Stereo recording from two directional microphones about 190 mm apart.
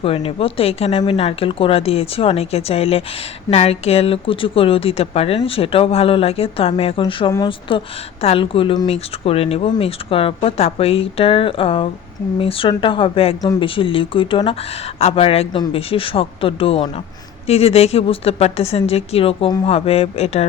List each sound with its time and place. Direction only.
0.0 s speech: 30° left (ahead or behind)